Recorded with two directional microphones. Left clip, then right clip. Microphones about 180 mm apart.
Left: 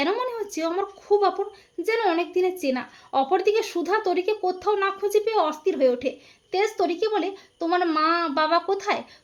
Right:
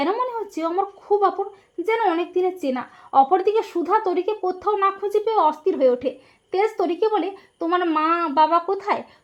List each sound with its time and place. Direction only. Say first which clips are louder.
0.0 s a woman's voice: right 2 dB; 15° right (ahead or behind)